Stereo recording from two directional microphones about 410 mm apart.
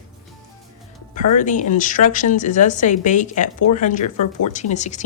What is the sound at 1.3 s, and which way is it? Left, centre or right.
Speech, centre.